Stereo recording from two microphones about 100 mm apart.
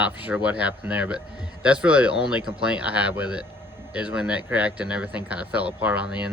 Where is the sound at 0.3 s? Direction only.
15° right (ahead or behind).